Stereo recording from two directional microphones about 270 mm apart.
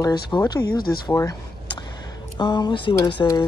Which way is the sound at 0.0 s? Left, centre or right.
Centre.